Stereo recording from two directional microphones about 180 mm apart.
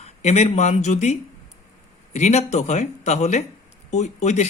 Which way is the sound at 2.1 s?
40° left (ahead or behind).